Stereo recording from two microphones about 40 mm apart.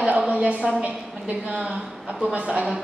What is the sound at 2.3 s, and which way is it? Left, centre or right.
Speech, right.